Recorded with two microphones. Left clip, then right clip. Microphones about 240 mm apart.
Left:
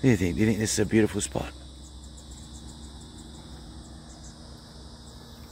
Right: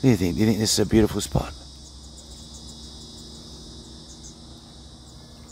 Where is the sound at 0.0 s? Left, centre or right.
Centre.